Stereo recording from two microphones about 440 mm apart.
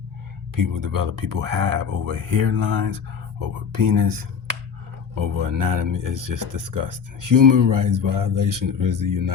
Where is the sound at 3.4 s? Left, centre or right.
Right.